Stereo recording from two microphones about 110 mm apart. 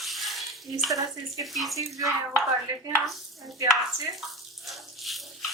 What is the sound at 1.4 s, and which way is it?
Speech, centre (ahead or behind).